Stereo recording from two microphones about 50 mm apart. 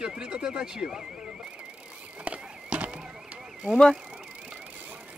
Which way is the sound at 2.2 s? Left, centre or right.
Right.